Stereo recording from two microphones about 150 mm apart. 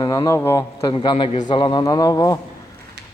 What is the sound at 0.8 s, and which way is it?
A man's voice, 30° left (ahead or behind).